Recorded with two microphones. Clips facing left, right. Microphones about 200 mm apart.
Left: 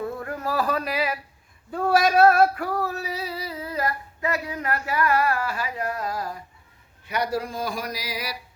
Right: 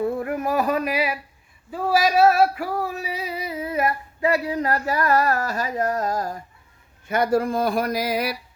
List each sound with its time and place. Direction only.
0.0 s a sound: 20° right (ahead or behind)
1.7 s female singing: 5° right (ahead or behind); by 6.4 s 45° right (ahead or behind)
7.1 s speech: 50° right (ahead or behind)